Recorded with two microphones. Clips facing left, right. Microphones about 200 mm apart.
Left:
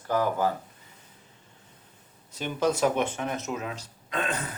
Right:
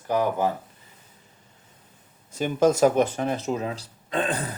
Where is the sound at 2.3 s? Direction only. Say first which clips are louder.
Right 6 dB; 45° right (ahead or behind).